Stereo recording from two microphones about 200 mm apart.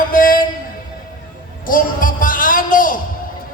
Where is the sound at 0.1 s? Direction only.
45° left (ahead or behind).